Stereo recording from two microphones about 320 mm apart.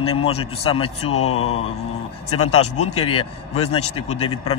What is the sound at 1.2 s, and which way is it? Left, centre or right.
Mantra, left.